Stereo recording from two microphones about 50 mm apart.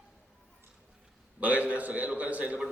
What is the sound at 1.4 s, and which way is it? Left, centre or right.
A man's voice, right.